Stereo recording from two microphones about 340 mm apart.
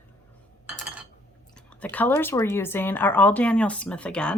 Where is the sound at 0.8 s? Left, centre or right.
Centre.